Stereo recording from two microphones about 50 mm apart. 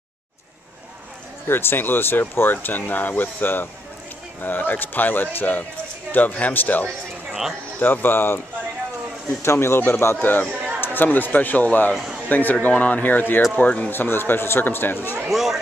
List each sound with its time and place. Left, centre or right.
1.5 s speech: left
9.4 s speech: left
10.2 s speech: left
13.6 s speech: left
13.8 s speech: left
15.2 s speech: centre